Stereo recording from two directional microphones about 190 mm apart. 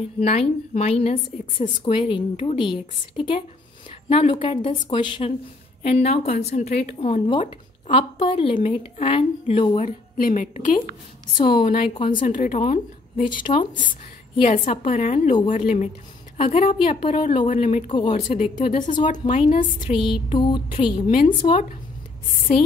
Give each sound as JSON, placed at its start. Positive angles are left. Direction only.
{"t": 0.2, "sound": "a woman's voice", "side_deg": 35}
{"t": 1.9, "sound": "speech", "side_deg": 25}
{"t": 6.4, "sound": "a woman's voice", "side_deg": 35}
{"t": 7.9, "sound": "speech", "side_deg": 30}
{"t": 9.8, "sound": "a woman's voice", "side_deg": 45}
{"t": 11.3, "sound": "speech", "side_deg": 25}
{"t": 12.2, "sound": "a woman's voice", "side_deg": 45}
{"t": 14.4, "sound": "a woman's voice", "side_deg": 35}
{"t": 18.6, "sound": "a woman's voice", "side_deg": 45}
{"t": 18.9, "sound": "speech", "side_deg": 25}